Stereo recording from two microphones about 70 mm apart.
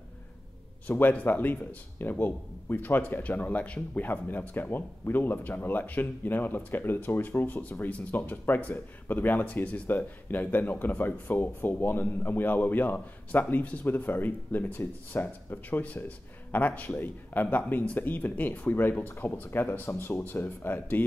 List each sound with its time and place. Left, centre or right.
0.8 s speech: left